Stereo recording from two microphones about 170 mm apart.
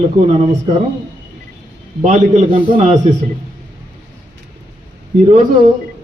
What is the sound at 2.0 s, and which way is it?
Speech, 40° right (ahead or behind).